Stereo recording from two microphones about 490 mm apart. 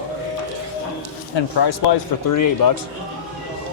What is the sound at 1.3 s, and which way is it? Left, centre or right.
Speech, left.